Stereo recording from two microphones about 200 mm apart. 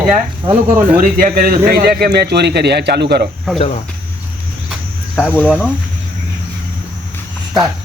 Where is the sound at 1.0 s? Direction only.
45° right (ahead or behind).